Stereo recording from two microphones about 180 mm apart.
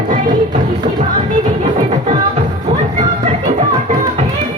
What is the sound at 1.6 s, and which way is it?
Music, 35° right (ahead or behind).